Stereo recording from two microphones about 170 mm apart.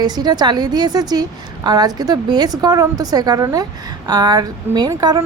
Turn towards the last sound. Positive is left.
turn(degrees=-20)  # may be behind; listen again after turning